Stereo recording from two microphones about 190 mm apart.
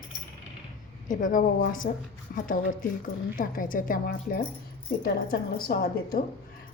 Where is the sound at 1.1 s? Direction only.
45° left (ahead or behind).